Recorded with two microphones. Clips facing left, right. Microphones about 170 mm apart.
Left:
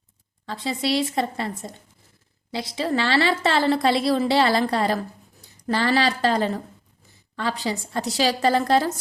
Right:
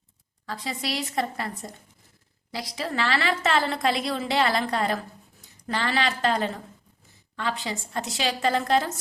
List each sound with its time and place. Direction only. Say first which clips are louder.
0.4 s a woman's voice: left 6 dB; 25° left (ahead or behind)